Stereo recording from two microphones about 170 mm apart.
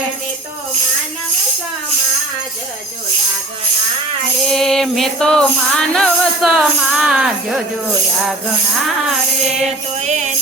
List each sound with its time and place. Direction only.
4.4 s music: centre (ahead or behind)
9.6 s music: 40° right (ahead or behind)